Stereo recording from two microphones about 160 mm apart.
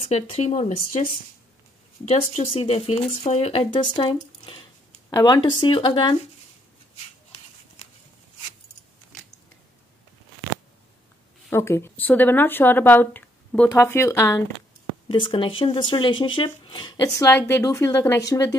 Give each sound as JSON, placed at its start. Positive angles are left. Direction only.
{"t": 0.0, "sound": "speech", "side_deg": 40}
{"t": 2.0, "sound": "speech", "side_deg": 40}
{"t": 11.5, "sound": "speech", "side_deg": 15}
{"t": 15.0, "sound": "speech", "side_deg": 30}